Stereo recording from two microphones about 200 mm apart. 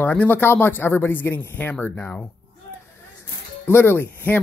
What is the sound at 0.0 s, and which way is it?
Speech, 5° left (ahead or behind).